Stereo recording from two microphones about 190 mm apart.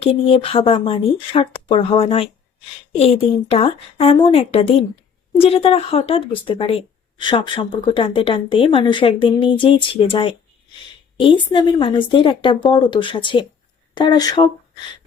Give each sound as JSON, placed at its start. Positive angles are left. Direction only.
{"t": 0.0, "sound": "a woman's voice", "side_deg": 30}